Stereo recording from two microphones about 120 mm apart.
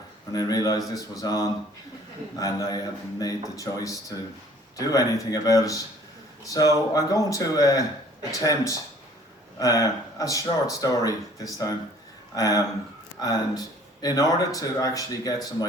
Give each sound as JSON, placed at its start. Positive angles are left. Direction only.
{"t": 0.3, "sound": "speech", "side_deg": 35}